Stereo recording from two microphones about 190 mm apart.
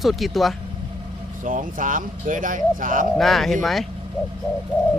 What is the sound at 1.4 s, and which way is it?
Speech, 45° right (ahead or behind).